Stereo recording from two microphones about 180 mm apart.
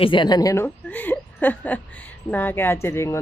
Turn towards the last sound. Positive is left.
turn(degrees=15)  # may be behind; listen again after turning